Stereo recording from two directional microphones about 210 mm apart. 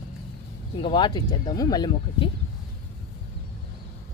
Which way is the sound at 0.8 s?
20° left (ahead or behind).